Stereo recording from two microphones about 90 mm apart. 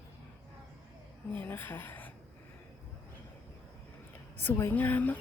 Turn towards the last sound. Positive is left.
turn(degrees=20)  # may be behind; listen again after turning